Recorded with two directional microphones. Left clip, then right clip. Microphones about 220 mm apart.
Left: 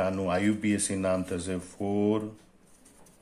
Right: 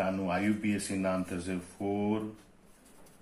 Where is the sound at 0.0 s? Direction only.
50° left (ahead or behind).